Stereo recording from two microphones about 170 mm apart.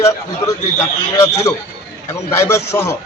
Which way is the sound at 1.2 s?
20° left (ahead or behind).